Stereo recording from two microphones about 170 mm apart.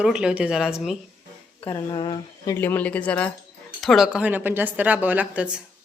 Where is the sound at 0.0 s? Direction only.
5° right (ahead or behind).